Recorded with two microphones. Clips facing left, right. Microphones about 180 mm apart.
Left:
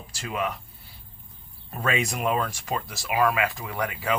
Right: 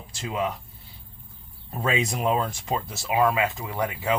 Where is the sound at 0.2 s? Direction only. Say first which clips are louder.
Right 2 dB; 25° right (ahead or behind).